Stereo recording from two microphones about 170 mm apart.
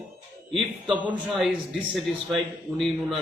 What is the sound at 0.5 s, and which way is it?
A man's voice, centre (ahead or behind).